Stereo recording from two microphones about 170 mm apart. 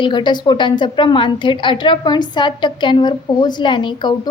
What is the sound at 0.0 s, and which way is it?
A woman's voice, 25° left (ahead or behind).